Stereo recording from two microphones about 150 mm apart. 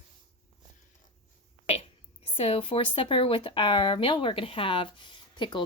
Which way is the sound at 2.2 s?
40° left (ahead or behind).